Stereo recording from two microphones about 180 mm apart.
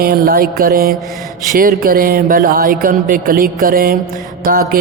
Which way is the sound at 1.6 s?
55° right (ahead or behind).